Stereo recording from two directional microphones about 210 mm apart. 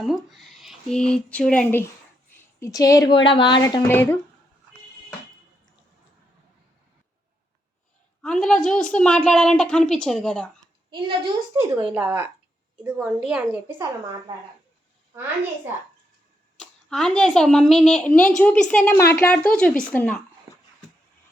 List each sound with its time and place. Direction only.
0.0 s a woman's voice: centre (ahead or behind)
8.2 s a woman's voice: centre (ahead or behind)
10.9 s a woman's voice: 25° right (ahead or behind)
11.5 s a woman's voice: 10° right (ahead or behind)
16.6 s a woman's voice: 5° left (ahead or behind)